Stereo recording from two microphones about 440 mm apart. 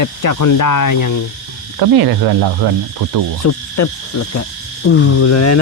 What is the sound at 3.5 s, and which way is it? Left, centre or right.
Hoot, left.